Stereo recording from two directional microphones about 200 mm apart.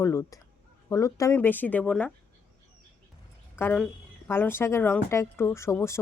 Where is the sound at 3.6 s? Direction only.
5° left (ahead or behind).